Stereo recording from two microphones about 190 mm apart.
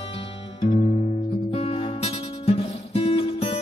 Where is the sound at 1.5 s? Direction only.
30° left (ahead or behind).